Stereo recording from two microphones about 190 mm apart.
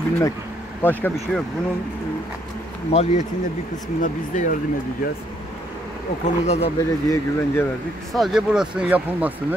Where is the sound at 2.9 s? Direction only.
35° left (ahead or behind).